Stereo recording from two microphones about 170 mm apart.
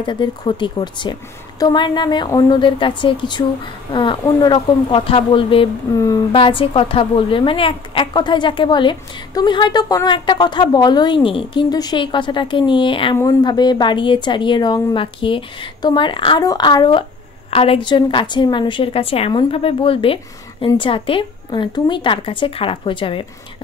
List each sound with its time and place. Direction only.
0.0 s a woman's voice: 25° left (ahead or behind)
5.9 s a woman's voice: 20° left (ahead or behind)
6.3 s a woman's voice: 30° left (ahead or behind)